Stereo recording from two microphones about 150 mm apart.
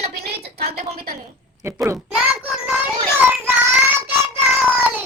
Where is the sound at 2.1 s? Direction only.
10° right (ahead or behind).